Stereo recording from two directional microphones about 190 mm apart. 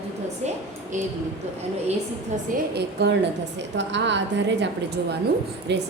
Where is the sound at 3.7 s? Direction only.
70° right (ahead or behind).